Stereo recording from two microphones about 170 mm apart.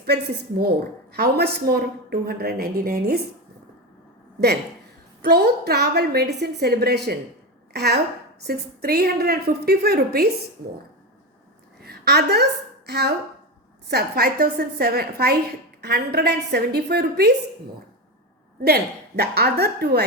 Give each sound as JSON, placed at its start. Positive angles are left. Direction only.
{"t": 0.0, "sound": "a woman's voice", "side_deg": -70}
{"t": 5.2, "sound": "a woman's voice", "side_deg": -75}
{"t": 11.8, "sound": "a woman's voice", "side_deg": -70}
{"t": 18.6, "sound": "a woman's voice", "side_deg": -70}